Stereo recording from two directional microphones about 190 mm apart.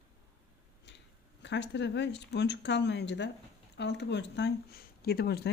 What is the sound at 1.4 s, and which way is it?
Speech, 65° left (ahead or behind).